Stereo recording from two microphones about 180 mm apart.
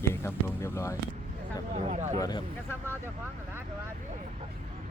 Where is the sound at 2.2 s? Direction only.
20° left (ahead or behind).